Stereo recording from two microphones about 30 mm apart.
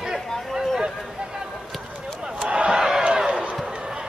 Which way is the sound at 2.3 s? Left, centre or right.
Right.